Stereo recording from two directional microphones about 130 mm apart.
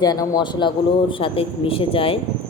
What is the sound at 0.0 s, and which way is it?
Speech, 30° left (ahead or behind).